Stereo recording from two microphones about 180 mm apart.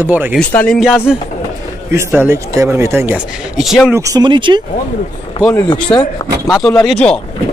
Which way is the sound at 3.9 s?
20° right (ahead or behind).